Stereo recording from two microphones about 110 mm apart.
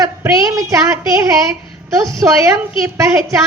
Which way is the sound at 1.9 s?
30° right (ahead or behind).